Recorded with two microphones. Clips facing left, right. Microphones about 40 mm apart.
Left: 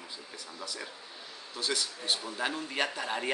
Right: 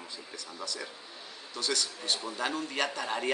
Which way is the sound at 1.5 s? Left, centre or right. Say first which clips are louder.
Right 1 dB; centre.